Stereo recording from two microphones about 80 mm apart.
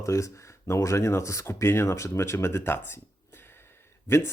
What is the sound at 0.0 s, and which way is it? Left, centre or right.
Speech, left.